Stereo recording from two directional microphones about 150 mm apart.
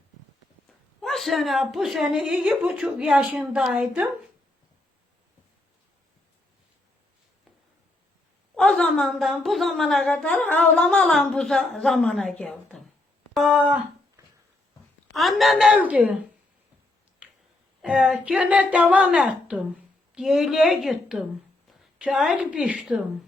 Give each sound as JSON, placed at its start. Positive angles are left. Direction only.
{"t": 1.0, "sound": "a woman's voice", "side_deg": 0}
{"t": 8.5, "sound": "a woman's voice", "side_deg": 5}
{"t": 13.3, "sound": "a woman's voice", "side_deg": -10}
{"t": 15.1, "sound": "a woman's voice", "side_deg": 0}
{"t": 17.8, "sound": "a woman's voice", "side_deg": -5}